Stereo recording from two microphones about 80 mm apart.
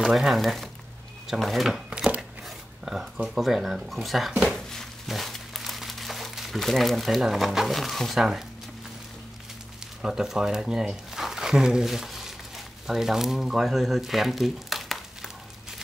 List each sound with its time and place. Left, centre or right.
0.0 s speech: centre
4.3 s a sound: centre
4.6 s crumpling: centre
10.0 s speech: centre